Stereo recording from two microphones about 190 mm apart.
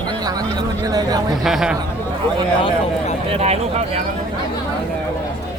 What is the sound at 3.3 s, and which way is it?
Speech, 35° right (ahead or behind).